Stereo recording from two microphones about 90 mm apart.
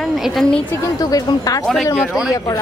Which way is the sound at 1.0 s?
45° left (ahead or behind).